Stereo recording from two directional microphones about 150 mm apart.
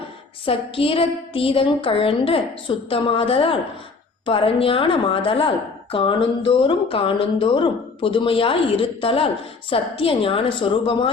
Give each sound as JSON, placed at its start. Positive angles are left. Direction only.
{"t": 0.4, "sound": "a woman's voice", "side_deg": 40}